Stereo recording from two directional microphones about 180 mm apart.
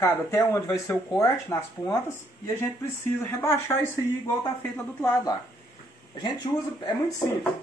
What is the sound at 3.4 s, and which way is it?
Speech, 15° left (ahead or behind).